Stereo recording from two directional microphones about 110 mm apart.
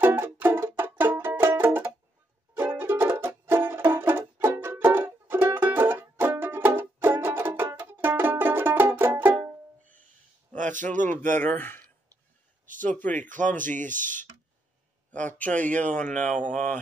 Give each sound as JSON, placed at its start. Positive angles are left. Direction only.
{"t": 0.0, "sound": "music", "side_deg": -20}
{"t": 11.1, "sound": "a man's voice", "side_deg": 15}
{"t": 12.9, "sound": "a man's voice", "side_deg": 15}
{"t": 15.0, "sound": "a man's voice", "side_deg": 15}